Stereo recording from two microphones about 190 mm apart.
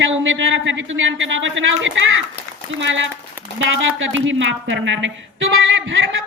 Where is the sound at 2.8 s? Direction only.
75° right (ahead or behind).